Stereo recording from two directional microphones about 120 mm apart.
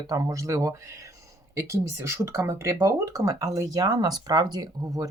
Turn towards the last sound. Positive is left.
turn(degrees=-35)  # may be behind; listen again after turning